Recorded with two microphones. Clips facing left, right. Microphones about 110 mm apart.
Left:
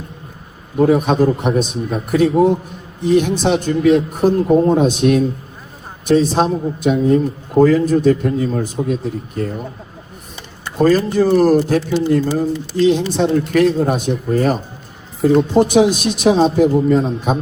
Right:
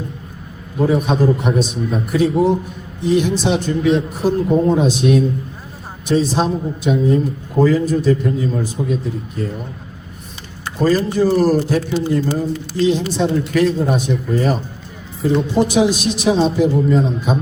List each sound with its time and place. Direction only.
0.9 s a man's voice: 50° left (ahead or behind)
10.8 s a man's voice: 50° left (ahead or behind)